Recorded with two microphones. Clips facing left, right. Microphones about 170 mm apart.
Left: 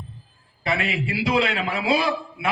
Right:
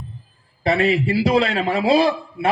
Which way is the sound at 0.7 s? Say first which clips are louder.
Right 8 dB; 35° right (ahead or behind).